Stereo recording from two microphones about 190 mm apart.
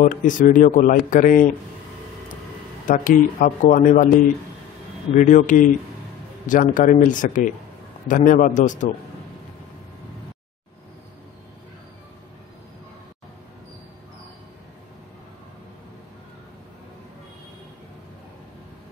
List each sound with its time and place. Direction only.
0.0 s speech: 45° left (ahead or behind)
2.9 s speech: 45° left (ahead or behind)
5.1 s speech: 40° left (ahead or behind)